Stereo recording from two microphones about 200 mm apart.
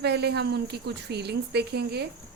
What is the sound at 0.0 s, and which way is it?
Speech, 55° right (ahead or behind).